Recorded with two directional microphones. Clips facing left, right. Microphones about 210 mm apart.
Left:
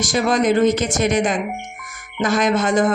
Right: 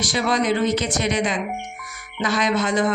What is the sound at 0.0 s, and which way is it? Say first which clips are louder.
Speech: left 4 dB; 45° left (ahead or behind).